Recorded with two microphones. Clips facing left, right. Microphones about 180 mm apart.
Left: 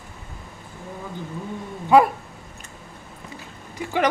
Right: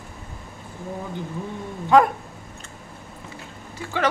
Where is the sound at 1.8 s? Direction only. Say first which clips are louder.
Left 1 dB; 10° left (ahead or behind).